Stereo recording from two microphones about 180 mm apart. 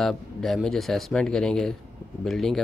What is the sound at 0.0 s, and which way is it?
Speech, centre (ahead or behind).